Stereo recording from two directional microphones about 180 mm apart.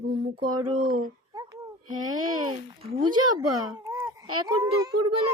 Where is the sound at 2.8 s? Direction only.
25° right (ahead or behind).